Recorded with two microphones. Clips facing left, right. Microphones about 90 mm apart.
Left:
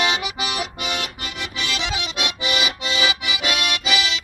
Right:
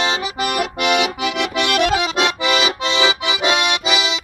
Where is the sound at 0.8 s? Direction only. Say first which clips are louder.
Right 10 dB; 80° right; by 2.1 s 55° right (ahead or behind).